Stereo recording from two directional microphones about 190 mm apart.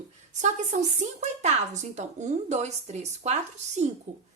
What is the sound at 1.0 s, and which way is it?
A woman's voice, 35° right (ahead or behind).